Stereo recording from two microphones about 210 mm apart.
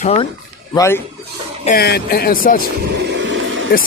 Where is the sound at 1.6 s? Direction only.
45° left (ahead or behind).